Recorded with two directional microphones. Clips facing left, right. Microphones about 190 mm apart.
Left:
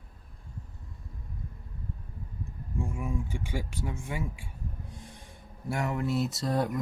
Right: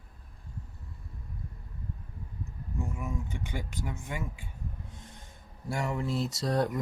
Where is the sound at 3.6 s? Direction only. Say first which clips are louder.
Left 2 dB; 30° left (ahead or behind).